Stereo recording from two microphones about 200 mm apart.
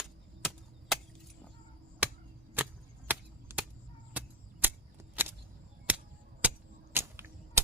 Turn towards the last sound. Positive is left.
turn(degrees=-10)  # may be behind; listen again after turning